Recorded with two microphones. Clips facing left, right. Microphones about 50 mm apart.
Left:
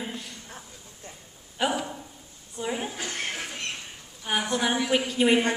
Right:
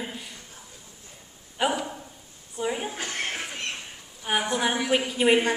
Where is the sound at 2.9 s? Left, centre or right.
Right.